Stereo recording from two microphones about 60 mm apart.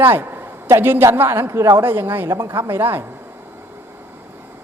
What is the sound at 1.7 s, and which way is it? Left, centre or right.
Speech, right.